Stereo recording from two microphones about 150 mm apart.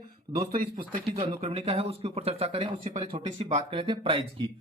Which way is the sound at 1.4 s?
40° right (ahead or behind).